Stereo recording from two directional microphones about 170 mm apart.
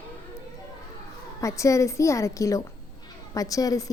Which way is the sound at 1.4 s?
20° left (ahead or behind).